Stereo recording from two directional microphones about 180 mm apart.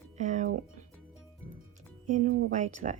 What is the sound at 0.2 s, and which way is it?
Music, 40° right (ahead or behind).